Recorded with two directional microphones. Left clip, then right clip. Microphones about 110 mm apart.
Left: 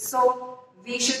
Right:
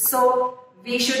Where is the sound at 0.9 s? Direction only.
30° right (ahead or behind).